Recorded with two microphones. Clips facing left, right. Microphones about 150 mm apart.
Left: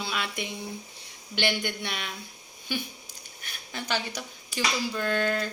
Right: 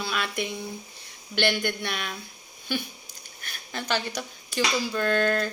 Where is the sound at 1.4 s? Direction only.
15° left (ahead or behind).